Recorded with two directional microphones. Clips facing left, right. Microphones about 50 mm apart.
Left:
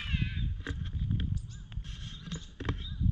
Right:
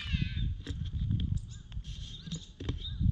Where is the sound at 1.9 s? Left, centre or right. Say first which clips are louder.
Left 1 dB; left.